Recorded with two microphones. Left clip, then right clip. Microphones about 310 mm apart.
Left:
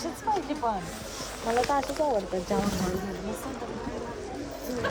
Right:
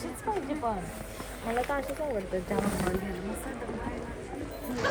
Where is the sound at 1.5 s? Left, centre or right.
Left.